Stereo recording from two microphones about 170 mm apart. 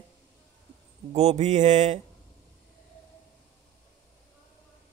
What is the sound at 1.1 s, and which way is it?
Speech, 40° right (ahead or behind).